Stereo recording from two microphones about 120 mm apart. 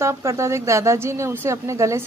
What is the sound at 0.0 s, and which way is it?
Speech, 20° right (ahead or behind).